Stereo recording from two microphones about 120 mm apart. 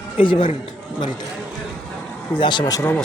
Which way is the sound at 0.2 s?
45° left (ahead or behind).